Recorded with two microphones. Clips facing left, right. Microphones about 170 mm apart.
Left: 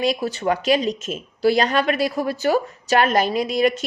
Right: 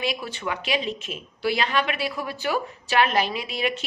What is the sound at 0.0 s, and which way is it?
Speech, 40° left (ahead or behind).